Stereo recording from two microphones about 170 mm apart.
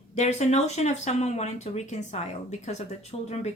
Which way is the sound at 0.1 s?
40° left (ahead or behind).